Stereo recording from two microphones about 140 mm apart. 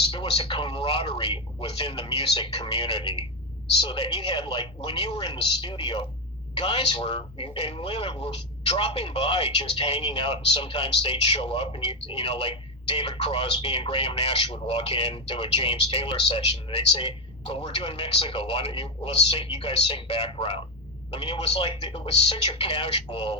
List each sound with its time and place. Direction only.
0.1 s speech: 40° left (ahead or behind)